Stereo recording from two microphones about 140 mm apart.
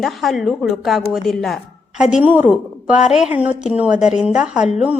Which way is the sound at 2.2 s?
10° right (ahead or behind).